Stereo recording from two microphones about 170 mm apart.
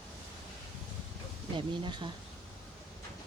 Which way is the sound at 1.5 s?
25° right (ahead or behind).